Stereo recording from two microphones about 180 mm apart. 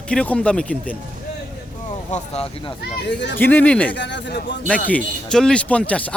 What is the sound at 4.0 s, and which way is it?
Speech, 80° left.